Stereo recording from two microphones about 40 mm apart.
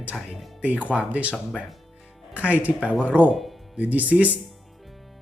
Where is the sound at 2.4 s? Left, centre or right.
Right.